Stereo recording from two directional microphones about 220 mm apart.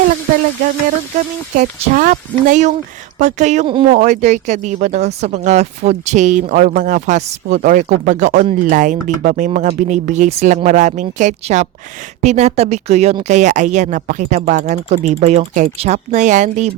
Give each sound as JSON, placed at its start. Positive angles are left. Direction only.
{"t": 1.5, "sound": "speech", "side_deg": -35}